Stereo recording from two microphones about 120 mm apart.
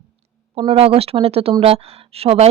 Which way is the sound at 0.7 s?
55° right (ahead or behind).